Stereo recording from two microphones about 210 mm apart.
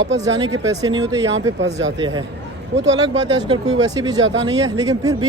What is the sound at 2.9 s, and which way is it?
Speech, 20° right (ahead or behind).